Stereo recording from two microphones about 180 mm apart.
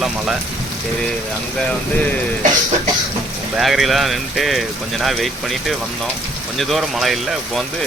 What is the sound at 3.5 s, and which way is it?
Speech, centre (ahead or behind).